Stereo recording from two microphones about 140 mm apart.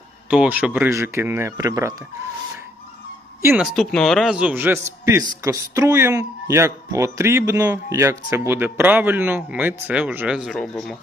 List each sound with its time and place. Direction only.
0.3 s speech: 10° right (ahead or behind); by 2.0 s 25° right (ahead or behind)
3.8 s speech: centre (ahead or behind)